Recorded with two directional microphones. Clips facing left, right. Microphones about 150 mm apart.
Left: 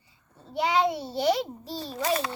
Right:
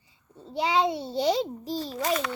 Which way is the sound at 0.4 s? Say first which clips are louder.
Even; 20° right (ahead or behind).